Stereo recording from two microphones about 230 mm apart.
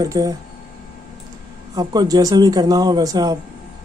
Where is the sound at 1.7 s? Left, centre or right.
Centre.